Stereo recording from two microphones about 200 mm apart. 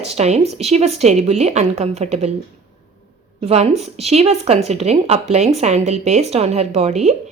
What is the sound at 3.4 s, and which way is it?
Speech, 30° right (ahead or behind).